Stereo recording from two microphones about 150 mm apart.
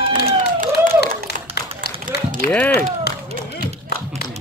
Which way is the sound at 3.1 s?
90° left.